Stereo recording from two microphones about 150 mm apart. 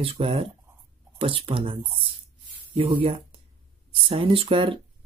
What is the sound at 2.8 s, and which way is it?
Speech, 35° right (ahead or behind).